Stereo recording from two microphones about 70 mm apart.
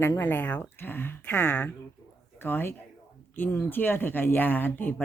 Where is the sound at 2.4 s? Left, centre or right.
Left.